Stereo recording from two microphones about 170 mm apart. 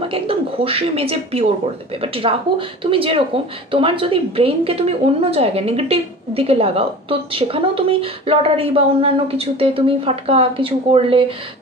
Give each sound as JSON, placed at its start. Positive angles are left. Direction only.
{"t": 0.1, "sound": "a woman's voice", "side_deg": -35}